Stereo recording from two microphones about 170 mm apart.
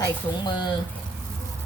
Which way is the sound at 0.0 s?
25° left (ahead or behind).